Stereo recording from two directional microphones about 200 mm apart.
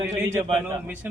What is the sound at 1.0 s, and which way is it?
Speech, 10° right (ahead or behind).